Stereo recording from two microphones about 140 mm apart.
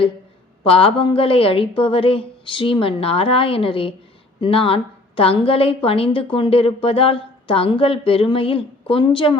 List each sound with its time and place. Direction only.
0.6 s a woman's voice: 40° left (ahead or behind)